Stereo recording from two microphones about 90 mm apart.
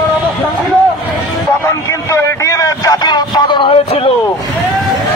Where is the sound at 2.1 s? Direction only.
35° left (ahead or behind); by 4.1 s 60° left (ahead or behind).